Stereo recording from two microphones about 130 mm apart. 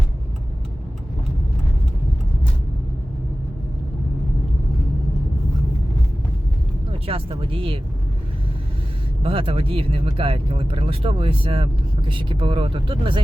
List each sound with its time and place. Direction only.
7.1 s speech: 45° right (ahead or behind)
9.2 s speech: 45° right (ahead or behind)